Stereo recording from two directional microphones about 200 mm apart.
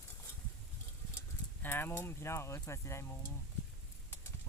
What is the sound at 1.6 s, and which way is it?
Speech, 10° left (ahead or behind).